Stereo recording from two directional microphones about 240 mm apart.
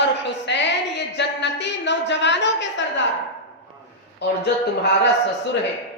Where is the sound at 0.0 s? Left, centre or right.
Left.